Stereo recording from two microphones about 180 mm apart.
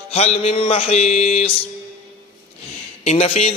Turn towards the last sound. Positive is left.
turn(degrees=35)  # may be behind; listen again after turning